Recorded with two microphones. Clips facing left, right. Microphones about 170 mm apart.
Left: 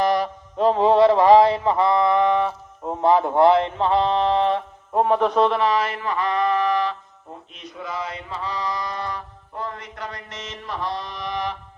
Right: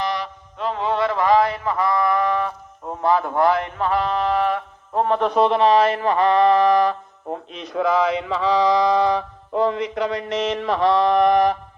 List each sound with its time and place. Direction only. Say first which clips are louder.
0.0 s mantra: left 5 dB; 45° left (ahead or behind); by 5.0 s 25° left (ahead or behind)
5.0 s speech: even; 10° left (ahead or behind)
5.3 s mantra: right 3 dB; 20° right (ahead or behind); by 6.9 s 40° right (ahead or behind)
7.3 s mantra: right 10 dB; 80° right; by 11.5 s 50° right (ahead or behind)